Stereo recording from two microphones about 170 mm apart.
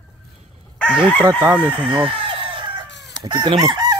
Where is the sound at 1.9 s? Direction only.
30° right (ahead or behind).